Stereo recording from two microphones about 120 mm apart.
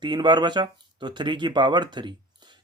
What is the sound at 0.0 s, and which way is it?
A man's voice, 40° right (ahead or behind).